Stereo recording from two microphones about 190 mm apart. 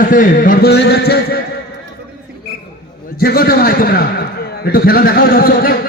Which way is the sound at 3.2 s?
50° left (ahead or behind).